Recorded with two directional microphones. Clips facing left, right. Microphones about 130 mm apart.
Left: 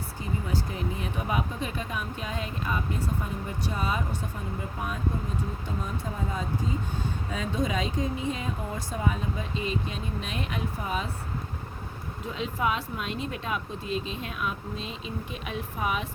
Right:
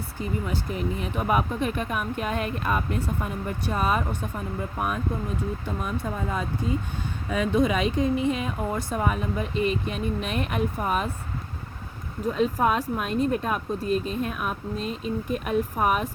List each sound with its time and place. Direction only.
0.2 s speech: 70° right (ahead or behind)
7.3 s speech: 70° right (ahead or behind)
12.3 s speech: 50° right (ahead or behind)